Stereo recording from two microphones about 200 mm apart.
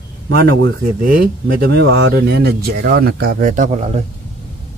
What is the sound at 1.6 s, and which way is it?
Speech, 55° right (ahead or behind).